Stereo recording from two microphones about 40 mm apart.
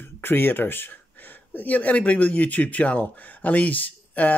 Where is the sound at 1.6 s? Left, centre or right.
Left.